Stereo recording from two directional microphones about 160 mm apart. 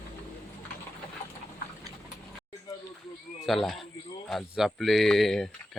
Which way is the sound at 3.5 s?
Centre (ahead or behind).